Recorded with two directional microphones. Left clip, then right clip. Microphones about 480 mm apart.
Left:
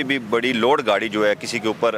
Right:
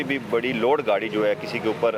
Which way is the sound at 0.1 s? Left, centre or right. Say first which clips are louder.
Left 3 dB; left.